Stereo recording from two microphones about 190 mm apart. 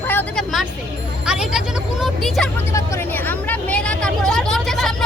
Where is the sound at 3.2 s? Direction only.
10° left (ahead or behind).